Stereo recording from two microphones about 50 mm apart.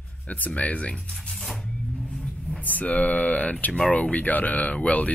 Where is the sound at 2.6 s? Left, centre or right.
Left.